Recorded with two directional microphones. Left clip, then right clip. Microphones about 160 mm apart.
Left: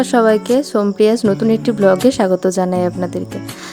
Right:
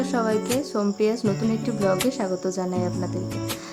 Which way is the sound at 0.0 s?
50° left (ahead or behind).